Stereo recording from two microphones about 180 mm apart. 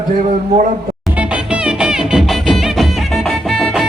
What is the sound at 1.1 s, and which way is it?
Music, 5° right (ahead or behind).